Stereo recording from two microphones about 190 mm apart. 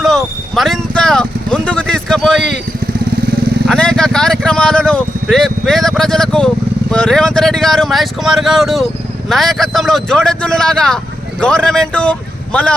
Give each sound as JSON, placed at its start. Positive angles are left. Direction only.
{"t": 0.0, "sound": "vehicle", "side_deg": 0}
{"t": 3.7, "sound": "speech", "side_deg": 5}